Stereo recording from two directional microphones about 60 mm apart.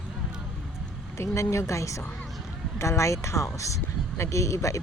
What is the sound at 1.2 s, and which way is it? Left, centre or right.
Speech, left.